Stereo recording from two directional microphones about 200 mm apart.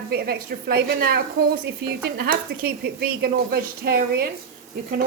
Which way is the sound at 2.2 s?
50° right (ahead or behind).